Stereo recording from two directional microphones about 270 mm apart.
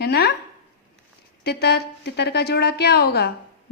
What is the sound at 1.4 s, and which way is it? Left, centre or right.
A woman's voice, left.